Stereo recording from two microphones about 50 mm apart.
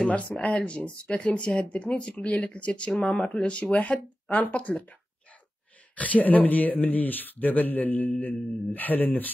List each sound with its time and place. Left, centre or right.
0.1 s speech: left
5.9 s speech: left